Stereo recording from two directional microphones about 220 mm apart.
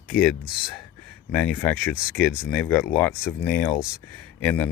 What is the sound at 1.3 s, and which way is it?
Speech, 5° left (ahead or behind).